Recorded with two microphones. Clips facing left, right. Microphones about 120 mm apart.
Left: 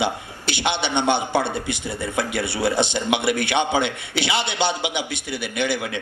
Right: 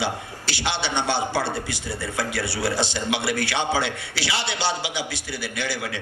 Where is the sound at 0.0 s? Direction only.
20° left (ahead or behind).